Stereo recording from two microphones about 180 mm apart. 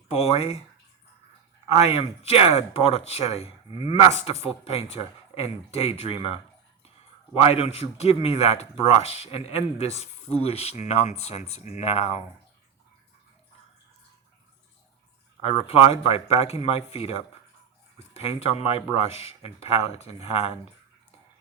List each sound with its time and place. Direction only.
0.1 s a man's voice: 35° left (ahead or behind)
1.6 s a man's voice: 35° left (ahead or behind)
7.3 s a man's voice: 35° left (ahead or behind)
15.4 s a man's voice: 35° left (ahead or behind)